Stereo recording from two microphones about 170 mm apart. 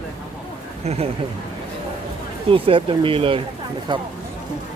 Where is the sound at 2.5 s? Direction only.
30° right (ahead or behind).